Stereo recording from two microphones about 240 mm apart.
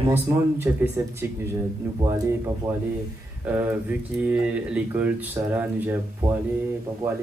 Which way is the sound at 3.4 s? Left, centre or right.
Centre.